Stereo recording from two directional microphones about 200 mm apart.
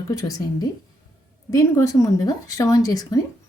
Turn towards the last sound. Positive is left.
turn(degrees=20)  # may be behind; listen again after turning